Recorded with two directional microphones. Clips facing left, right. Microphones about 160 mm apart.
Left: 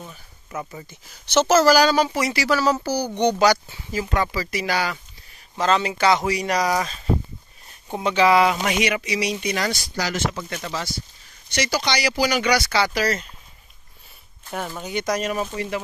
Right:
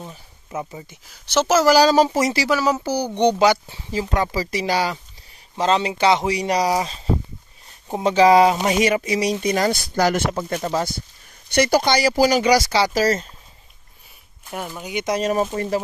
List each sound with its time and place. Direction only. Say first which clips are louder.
0.0 s speech: right 3 dB; 25° right (ahead or behind)
1.3 s speech: left 1 dB; 10° right (ahead or behind)
1.8 s speech: right 3 dB; 35° right (ahead or behind)
2.4 s speech: right 1 dB; 15° right (ahead or behind)
7.9 s speech: right 4 dB; 40° right (ahead or behind)
10.5 s speech: right 7 dB; 40° right (ahead or behind)
11.5 s speech: right 7 dB; 55° right (ahead or behind); by 13.3 s 35° right (ahead or behind)
14.4 s speech: left 1 dB; 10° right (ahead or behind)
15.0 s speech: right 5 dB; 35° right (ahead or behind)